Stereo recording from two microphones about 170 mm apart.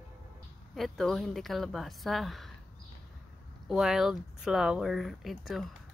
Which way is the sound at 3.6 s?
5° right (ahead or behind).